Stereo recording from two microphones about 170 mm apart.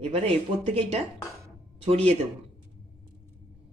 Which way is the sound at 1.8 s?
35° right (ahead or behind).